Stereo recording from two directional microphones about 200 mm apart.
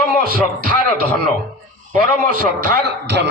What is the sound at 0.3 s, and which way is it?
A man's voice, 45° right (ahead or behind).